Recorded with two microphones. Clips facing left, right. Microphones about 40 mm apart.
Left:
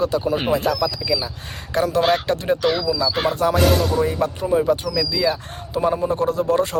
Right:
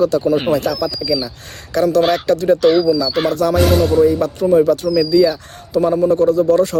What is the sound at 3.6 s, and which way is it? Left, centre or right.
Speech, centre.